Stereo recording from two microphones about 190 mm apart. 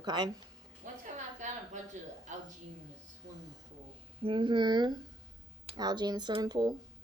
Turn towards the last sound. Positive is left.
turn(degrees=-20)  # may be behind; listen again after turning